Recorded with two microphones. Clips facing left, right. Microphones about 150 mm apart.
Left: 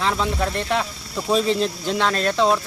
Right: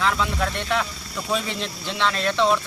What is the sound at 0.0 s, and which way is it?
Speech, 30° left (ahead or behind).